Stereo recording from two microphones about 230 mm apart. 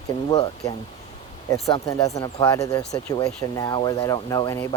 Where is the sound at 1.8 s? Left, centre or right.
Centre.